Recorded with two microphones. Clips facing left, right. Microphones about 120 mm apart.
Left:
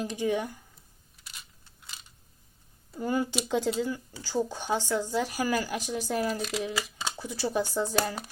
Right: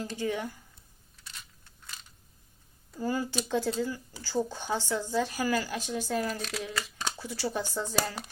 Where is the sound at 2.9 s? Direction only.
20° left (ahead or behind).